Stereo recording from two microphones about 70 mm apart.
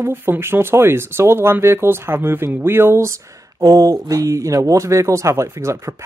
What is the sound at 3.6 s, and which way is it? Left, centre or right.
Speech, right.